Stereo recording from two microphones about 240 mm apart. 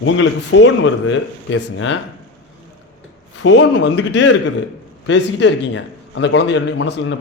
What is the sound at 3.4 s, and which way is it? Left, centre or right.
A man's voice, left.